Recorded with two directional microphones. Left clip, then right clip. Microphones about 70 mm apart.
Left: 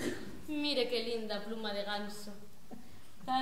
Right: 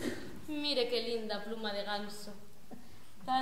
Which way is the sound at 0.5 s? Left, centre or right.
Centre.